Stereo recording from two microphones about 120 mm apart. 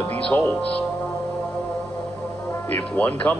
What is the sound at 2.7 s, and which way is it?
Speech, 15° left (ahead or behind).